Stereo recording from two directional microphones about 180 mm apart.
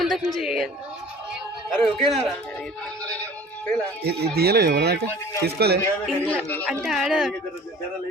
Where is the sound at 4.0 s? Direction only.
65° right (ahead or behind).